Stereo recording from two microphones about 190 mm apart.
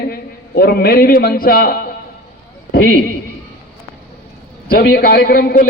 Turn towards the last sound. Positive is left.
turn(degrees=50)  # may be behind; listen again after turning